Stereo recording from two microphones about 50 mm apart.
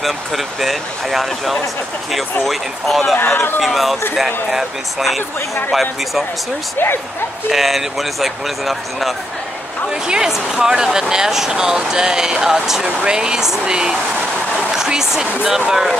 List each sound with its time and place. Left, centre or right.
0.0 s speech: centre
3.3 s speech: left
3.6 s speech: centre
7.5 s speech: centre
10.0 s speech: centre
14.7 s a sound: centre
15.4 s speech: centre